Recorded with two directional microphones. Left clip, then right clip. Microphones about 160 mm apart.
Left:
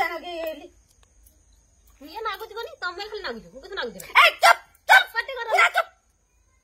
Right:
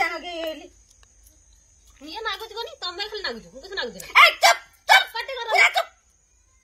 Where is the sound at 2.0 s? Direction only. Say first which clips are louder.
Right 1 dB; 5° right (ahead or behind).